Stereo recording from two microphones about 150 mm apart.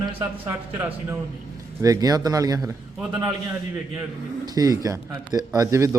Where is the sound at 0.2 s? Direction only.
10° right (ahead or behind).